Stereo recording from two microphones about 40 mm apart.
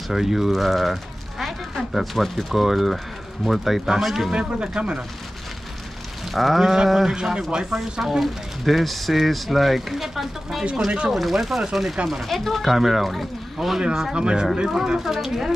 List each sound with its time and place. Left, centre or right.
0.1 s speech: centre
1.4 s a sound: centre
2.5 s speech: centre
4.3 s speech: right
6.3 s speech: centre
7.2 s speech: right
8.0 s speech: centre
13.6 s speech: centre
14.1 s speech: right
15.0 s speech: centre